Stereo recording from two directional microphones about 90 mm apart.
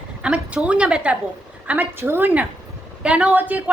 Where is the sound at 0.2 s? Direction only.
10° right (ahead or behind).